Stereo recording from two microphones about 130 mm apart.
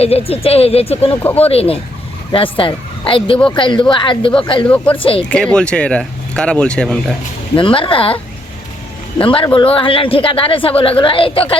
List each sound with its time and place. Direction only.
0.0 s a man's voice: 50° left (ahead or behind)
1.2 s speech: 15° left (ahead or behind)
1.5 s a man's voice: 50° left (ahead or behind)
4.6 s speech: 10° left (ahead or behind)
4.9 s a man's voice: 45° left (ahead or behind)
5.2 s speech: 10° left (ahead or behind)
7.5 s a man's voice: 40° left (ahead or behind)